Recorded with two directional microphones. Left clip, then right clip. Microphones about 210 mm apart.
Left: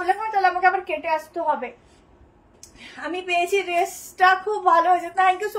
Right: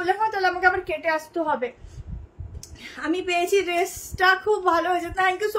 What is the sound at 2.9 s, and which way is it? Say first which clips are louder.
A woman's voice: even; 25° right (ahead or behind).